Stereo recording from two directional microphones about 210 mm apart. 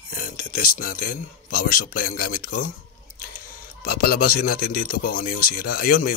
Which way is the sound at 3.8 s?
45° left (ahead or behind).